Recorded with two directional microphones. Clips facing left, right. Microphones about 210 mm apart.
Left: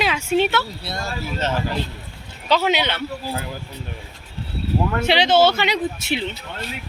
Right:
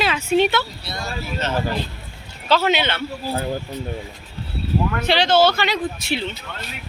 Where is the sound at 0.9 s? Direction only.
50° left (ahead or behind).